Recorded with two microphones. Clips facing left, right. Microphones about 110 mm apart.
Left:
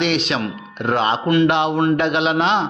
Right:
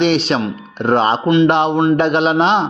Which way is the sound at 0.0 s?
35° right (ahead or behind).